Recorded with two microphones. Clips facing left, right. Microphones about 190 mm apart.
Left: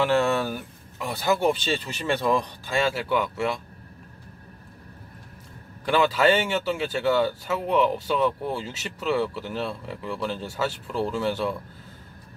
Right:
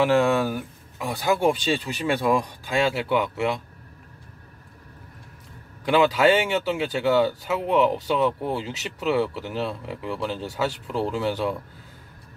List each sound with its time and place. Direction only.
0.0 s speech: 10° right (ahead or behind)
5.9 s speech: 15° right (ahead or behind)